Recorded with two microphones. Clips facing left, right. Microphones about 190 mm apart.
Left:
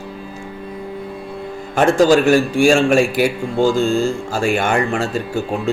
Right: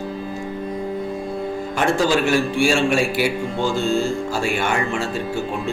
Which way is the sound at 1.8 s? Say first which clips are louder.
Left 7 dB; 45° left (ahead or behind).